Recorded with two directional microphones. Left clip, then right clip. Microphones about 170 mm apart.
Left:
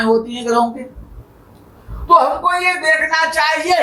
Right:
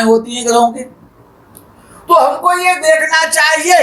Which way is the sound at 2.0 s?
45° right (ahead or behind).